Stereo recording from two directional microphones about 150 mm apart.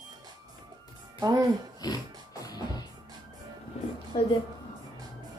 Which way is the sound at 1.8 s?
25° left (ahead or behind).